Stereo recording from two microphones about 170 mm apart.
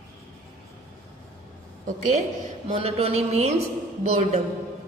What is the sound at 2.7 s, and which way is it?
A woman's voice, 35° right (ahead or behind).